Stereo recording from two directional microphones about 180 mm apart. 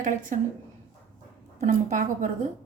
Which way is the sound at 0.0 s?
45° right (ahead or behind).